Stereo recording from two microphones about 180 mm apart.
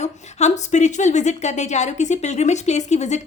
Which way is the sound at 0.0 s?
40° left (ahead or behind).